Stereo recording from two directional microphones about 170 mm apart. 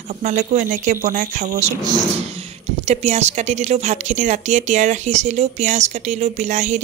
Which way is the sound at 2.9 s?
40° right (ahead or behind).